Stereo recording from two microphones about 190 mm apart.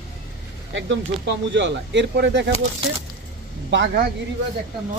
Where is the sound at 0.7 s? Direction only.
70° right (ahead or behind).